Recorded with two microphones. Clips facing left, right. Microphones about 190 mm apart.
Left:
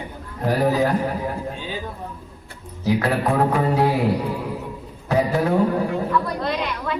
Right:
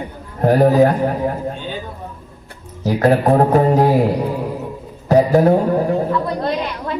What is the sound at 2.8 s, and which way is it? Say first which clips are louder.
Speech: right 6 dB; 45° right (ahead or behind).